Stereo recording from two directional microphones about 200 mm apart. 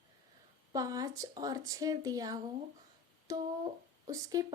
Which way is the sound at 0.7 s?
20° right (ahead or behind).